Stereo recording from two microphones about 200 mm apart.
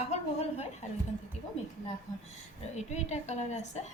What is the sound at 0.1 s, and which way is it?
Speech, 35° left (ahead or behind).